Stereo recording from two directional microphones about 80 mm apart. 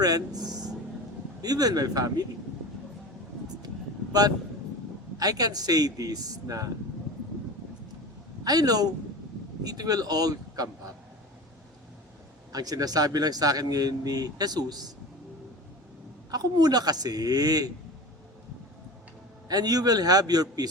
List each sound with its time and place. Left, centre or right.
0.0 s a man's voice: right
5.2 s speech: right
8.4 s speech: right
12.5 s speech: right
16.3 s speech: right
19.5 s a man's voice: right